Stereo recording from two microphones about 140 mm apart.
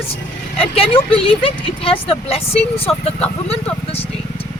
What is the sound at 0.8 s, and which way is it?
Speech, 45° left (ahead or behind).